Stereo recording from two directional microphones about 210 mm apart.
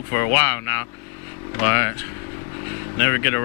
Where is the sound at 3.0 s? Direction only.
10° left (ahead or behind).